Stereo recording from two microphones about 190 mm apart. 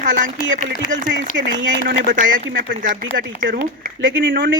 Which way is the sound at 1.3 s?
75° right (ahead or behind).